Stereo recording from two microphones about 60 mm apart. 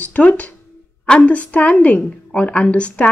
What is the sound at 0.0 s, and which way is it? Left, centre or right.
A woman's voice, left.